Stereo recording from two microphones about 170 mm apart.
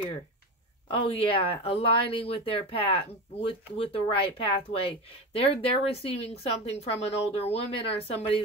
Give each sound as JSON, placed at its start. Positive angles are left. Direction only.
{"t": 0.8, "sound": "speech", "side_deg": 35}